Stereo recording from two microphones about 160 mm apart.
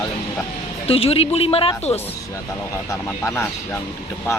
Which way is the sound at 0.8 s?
35° left (ahead or behind).